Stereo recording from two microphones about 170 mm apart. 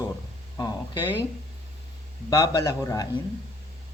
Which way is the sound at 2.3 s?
20° left (ahead or behind).